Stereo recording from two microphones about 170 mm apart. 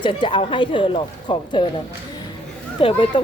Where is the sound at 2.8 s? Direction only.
30° left (ahead or behind).